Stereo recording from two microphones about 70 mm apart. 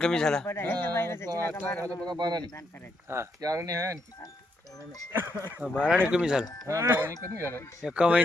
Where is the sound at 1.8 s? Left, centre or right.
Right.